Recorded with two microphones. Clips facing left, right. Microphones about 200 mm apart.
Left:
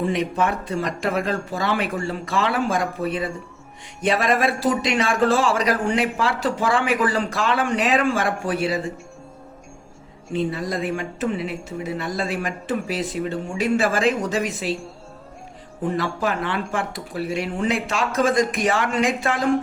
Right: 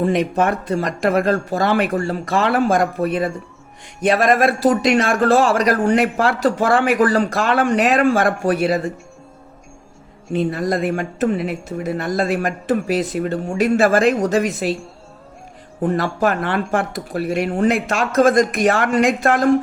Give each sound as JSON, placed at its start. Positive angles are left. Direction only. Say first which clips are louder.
{"t": 0.0, "sound": "speech", "louder": "right 5 dB", "side_deg": -50}
{"t": 10.3, "sound": "speech", "louder": "right 5 dB", "side_deg": -50}
{"t": 15.8, "sound": "speech", "louder": "right 5 dB", "side_deg": -50}